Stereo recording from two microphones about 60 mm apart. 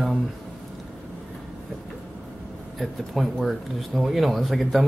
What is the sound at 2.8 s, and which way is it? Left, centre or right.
Speech, centre.